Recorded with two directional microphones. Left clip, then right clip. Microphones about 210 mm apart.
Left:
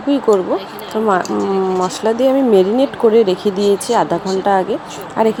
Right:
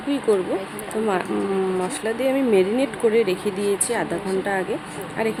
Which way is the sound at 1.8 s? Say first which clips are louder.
Left 9 dB; 20° left (ahead or behind).